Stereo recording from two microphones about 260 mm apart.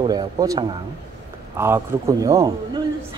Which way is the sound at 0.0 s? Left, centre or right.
Centre.